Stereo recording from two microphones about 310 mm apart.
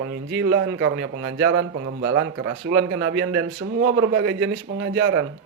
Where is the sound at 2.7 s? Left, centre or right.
Right.